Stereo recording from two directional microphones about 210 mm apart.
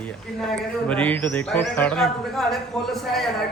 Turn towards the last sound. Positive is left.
turn(degrees=0)  # may be behind; listen again after turning